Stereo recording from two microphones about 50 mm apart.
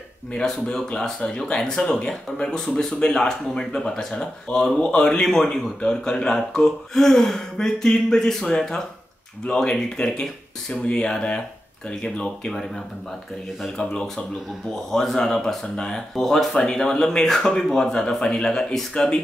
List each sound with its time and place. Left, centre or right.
0.3 s speech: centre
13.7 s speech: centre